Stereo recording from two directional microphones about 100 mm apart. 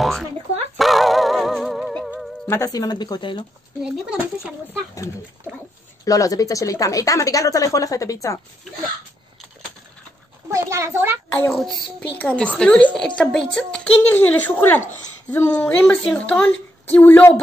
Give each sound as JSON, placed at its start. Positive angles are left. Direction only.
{"t": 0.0, "sound": "a sound", "side_deg": 0}
{"t": 0.7, "sound": "music", "side_deg": 0}
{"t": 2.4, "sound": "speech", "side_deg": 30}
{"t": 6.0, "sound": "speech", "side_deg": 35}
{"t": 10.5, "sound": "a child's voice", "side_deg": -30}
{"t": 12.2, "sound": "a woman's voice", "side_deg": 15}